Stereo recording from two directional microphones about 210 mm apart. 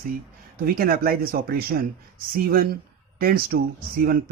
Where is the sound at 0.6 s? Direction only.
45° right (ahead or behind).